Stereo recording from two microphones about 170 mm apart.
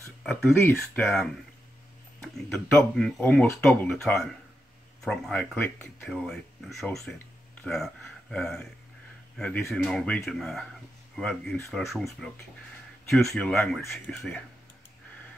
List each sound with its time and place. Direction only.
0.2 s speech: centre (ahead or behind)